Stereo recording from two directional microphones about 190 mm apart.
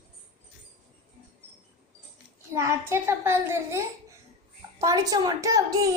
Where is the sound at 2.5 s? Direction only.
15° right (ahead or behind).